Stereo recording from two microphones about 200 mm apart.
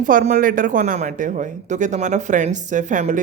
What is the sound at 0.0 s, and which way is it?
Speech, 40° right (ahead or behind).